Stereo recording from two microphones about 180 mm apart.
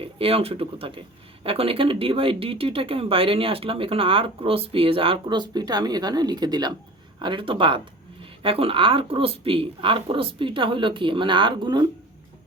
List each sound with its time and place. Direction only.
0.0 s speech: 30° right (ahead or behind)